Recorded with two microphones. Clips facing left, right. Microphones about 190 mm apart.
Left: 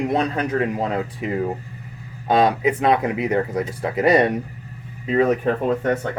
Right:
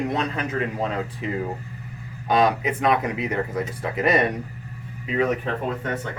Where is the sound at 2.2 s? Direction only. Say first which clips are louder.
Left 3 dB; 25° left (ahead or behind).